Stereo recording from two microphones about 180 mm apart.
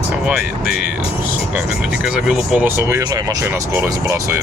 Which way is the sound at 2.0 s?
5° right (ahead or behind).